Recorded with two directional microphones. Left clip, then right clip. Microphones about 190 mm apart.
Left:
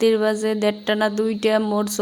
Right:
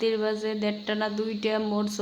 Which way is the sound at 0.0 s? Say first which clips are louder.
Left 8 dB; 35° left (ahead or behind).